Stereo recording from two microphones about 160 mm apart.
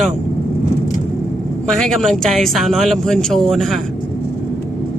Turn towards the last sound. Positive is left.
turn(degrees=0)  # may be behind; listen again after turning